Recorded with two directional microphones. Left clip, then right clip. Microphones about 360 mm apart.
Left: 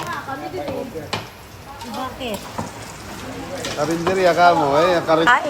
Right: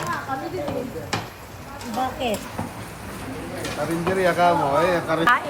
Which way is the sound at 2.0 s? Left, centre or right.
Centre.